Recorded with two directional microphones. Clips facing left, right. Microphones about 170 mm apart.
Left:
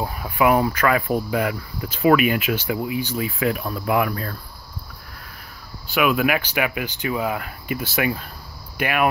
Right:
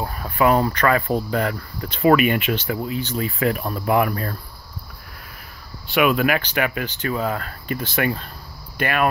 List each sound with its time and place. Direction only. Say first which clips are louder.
0.0 s speech: even; 15° left (ahead or behind)
2.6 s speech: left 1 dB; 15° left (ahead or behind)
5.9 s speech: right 1 dB; centre (ahead or behind)